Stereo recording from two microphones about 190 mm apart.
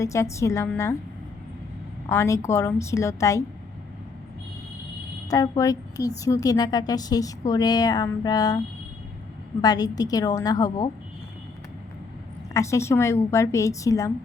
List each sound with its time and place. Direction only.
0.0 s a woman's voice: 15° left (ahead or behind)
2.0 s a woman's voice: 15° left (ahead or behind)
5.3 s a woman's voice: 15° left (ahead or behind)
12.5 s a woman's voice: 15° left (ahead or behind)